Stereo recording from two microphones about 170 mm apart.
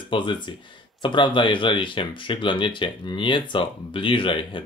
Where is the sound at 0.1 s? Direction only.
30° left (ahead or behind).